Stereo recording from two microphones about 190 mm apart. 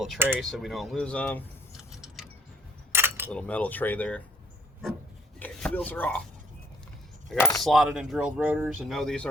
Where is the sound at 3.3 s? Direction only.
5° left (ahead or behind).